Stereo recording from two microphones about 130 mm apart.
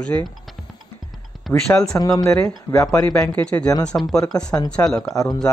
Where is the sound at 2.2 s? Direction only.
5° left (ahead or behind).